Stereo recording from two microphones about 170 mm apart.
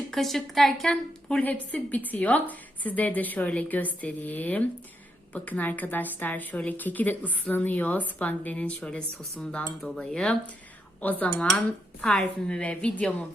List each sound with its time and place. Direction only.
0.1 s a woman's voice: centre (ahead or behind)